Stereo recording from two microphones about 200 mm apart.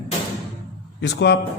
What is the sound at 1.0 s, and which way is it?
Speech, 60° left (ahead or behind).